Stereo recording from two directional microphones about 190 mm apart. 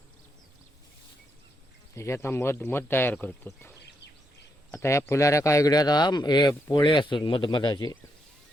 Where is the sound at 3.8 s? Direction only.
60° left (ahead or behind).